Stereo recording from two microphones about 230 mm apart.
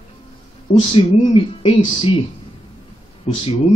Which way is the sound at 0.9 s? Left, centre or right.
Left.